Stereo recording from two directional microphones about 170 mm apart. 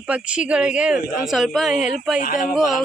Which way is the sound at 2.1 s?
50° left (ahead or behind).